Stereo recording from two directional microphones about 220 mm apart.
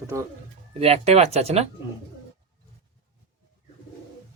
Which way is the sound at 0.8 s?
25° right (ahead or behind).